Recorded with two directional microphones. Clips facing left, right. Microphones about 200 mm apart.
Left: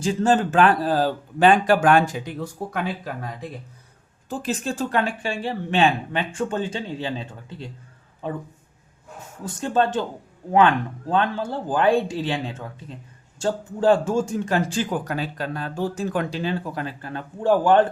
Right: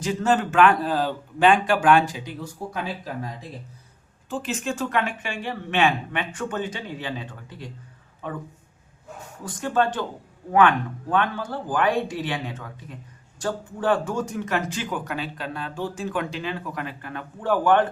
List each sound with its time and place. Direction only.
0.0 s a man's voice: 30° left (ahead or behind); by 3.1 s 60° left (ahead or behind)
4.3 s a man's voice: 35° left (ahead or behind)
9.4 s speech: 25° left (ahead or behind)
11.1 s a man's voice: 25° left (ahead or behind)